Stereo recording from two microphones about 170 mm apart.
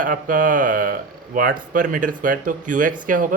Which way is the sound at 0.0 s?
50° right (ahead or behind).